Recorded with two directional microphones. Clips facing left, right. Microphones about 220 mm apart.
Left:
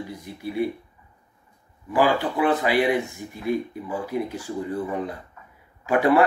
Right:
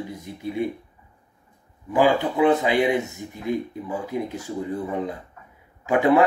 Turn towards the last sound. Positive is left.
turn(degrees=-20)  # may be behind; listen again after turning